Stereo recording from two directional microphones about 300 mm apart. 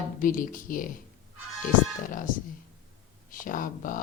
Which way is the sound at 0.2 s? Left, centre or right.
Left.